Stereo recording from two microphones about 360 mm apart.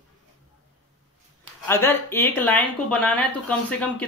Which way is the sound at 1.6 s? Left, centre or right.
Centre.